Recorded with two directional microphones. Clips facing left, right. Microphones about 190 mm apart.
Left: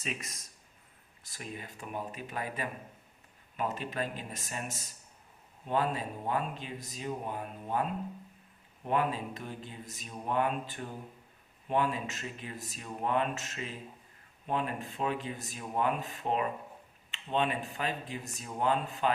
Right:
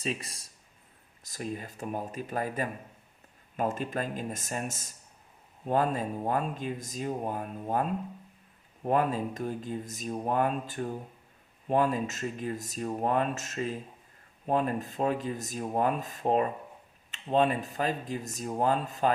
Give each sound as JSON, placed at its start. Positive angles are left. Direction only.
{"t": 0.0, "sound": "speech", "side_deg": -30}